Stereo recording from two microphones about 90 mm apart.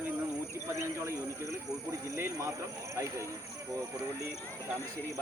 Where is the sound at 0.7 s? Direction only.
35° right (ahead or behind).